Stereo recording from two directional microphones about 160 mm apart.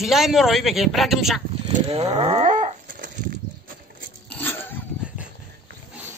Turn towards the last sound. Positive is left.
turn(degrees=15)  # may be behind; listen again after turning